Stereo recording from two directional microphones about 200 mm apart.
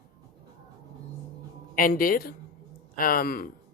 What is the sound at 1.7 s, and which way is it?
A woman's voice, 45° left (ahead or behind).